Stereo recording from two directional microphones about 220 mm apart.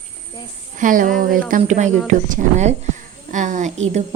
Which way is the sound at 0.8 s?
35° right (ahead or behind).